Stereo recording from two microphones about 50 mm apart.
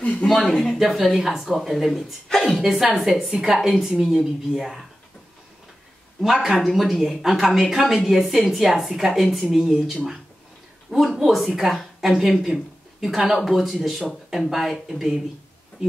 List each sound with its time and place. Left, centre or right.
0.0 s a sound: left
0.3 s a woman's voice: centre
2.2 s music: centre
2.6 s a woman's voice: centre
6.2 s a woman's voice: centre
11.1 s a woman's voice: centre